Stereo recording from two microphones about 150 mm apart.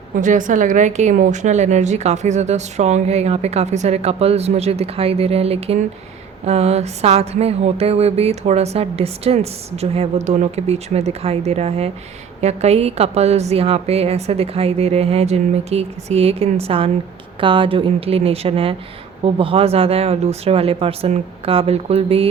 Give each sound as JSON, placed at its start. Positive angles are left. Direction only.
{"t": 0.2, "sound": "a woman's voice", "side_deg": -55}